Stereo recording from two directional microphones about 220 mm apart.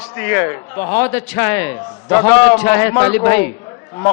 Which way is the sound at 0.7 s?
25° left (ahead or behind).